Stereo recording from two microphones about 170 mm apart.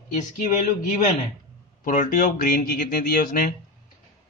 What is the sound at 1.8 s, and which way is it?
Speech, 50° left (ahead or behind).